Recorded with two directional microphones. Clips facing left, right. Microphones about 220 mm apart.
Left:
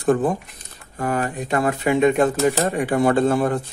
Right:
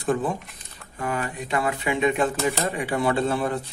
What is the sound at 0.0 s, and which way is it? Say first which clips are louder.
Speech: left 6 dB; 50° left (ahead or behind).